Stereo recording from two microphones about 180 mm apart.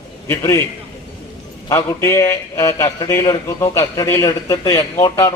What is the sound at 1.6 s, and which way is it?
A man's voice, 15° left (ahead or behind).